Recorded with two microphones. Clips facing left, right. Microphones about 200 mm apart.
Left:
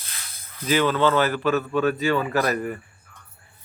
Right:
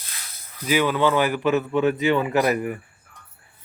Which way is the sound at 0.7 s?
10° right (ahead or behind).